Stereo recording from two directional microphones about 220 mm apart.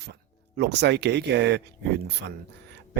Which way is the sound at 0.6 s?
50° right (ahead or behind).